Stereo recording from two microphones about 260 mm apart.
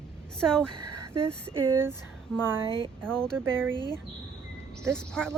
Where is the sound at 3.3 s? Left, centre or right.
Centre.